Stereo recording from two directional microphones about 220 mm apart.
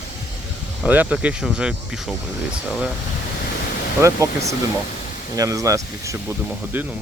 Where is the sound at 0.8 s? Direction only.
5° right (ahead or behind).